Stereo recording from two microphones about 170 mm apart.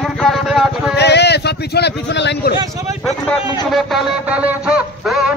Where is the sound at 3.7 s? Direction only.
5° right (ahead or behind).